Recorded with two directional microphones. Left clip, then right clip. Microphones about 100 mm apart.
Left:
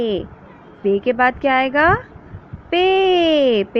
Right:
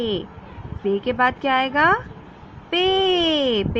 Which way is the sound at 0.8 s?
35° left (ahead or behind).